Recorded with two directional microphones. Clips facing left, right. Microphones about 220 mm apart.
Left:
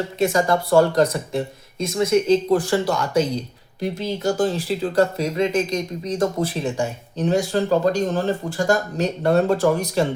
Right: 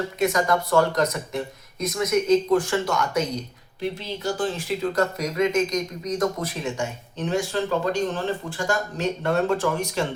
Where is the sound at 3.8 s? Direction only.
45° left (ahead or behind).